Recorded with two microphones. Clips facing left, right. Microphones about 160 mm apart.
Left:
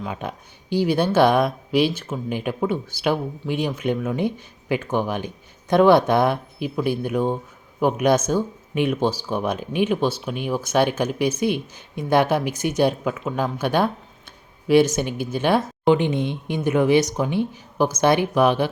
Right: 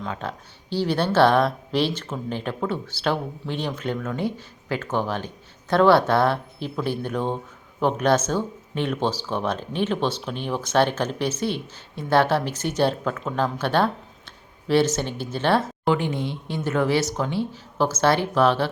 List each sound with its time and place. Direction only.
0.0 s speech: 15° left (ahead or behind)